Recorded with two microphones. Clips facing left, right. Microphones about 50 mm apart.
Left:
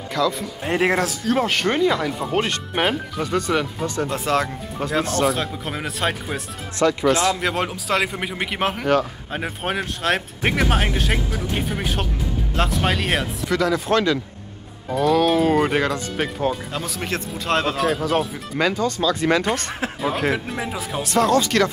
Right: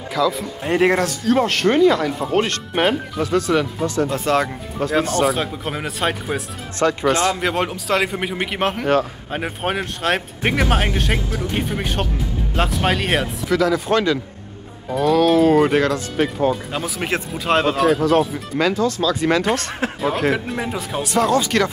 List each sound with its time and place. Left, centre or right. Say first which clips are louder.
0.1 s speech: right 2 dB; centre
6.8 s speech: even; right
7.3 s speech: right 2 dB; centre
16.8 s speech: right 3 dB; centre